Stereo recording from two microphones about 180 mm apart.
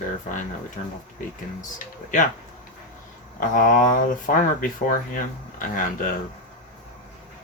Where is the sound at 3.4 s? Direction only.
50° left (ahead or behind).